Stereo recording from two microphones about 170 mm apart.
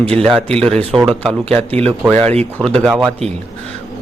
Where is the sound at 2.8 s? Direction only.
10° right (ahead or behind).